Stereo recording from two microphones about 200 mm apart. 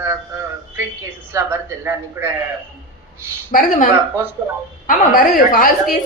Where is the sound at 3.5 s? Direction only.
40° left (ahead or behind).